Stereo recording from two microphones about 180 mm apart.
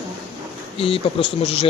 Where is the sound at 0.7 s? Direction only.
30° left (ahead or behind).